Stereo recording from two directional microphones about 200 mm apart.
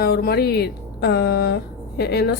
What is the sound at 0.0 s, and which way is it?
A woman's voice, 50° left (ahead or behind).